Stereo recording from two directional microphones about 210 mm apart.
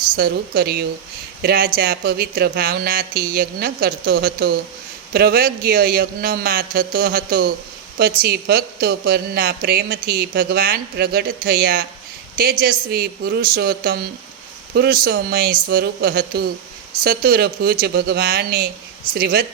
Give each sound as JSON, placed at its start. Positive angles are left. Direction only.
{"t": 0.2, "sound": "speech", "side_deg": -45}